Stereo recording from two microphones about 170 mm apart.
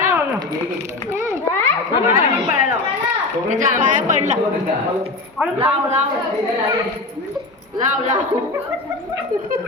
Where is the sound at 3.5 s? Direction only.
50° right (ahead or behind).